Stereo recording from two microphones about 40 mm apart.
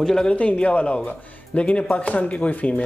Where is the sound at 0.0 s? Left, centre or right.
Centre.